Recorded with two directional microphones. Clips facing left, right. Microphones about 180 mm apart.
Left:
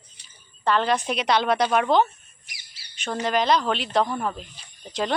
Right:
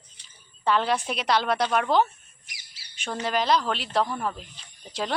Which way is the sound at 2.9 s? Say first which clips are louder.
Left 3 dB; 10° right (ahead or behind).